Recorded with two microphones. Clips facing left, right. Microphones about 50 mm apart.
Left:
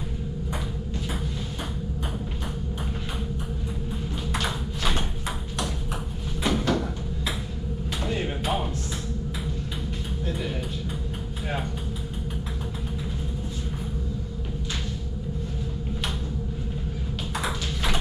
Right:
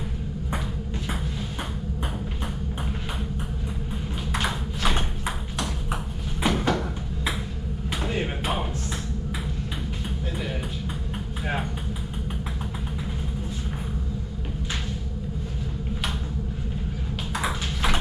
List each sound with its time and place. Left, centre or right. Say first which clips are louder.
4.4 s ping: right 3 dB; centre
6.4 s sliding door: right 1 dB; centre
17.4 s ping: right 2 dB; centre